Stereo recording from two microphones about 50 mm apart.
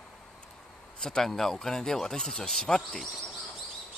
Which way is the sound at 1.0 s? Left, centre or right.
Centre.